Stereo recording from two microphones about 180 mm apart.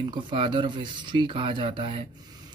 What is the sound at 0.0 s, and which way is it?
Speech, 30° right (ahead or behind).